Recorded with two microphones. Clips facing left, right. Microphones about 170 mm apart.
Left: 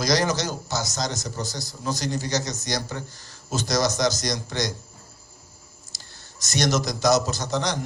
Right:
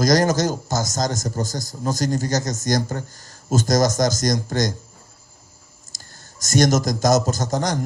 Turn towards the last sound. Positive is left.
turn(degrees=-45)  # may be behind; listen again after turning